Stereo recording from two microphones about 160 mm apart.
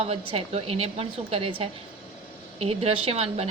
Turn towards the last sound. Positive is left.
turn(degrees=-40)  # may be behind; listen again after turning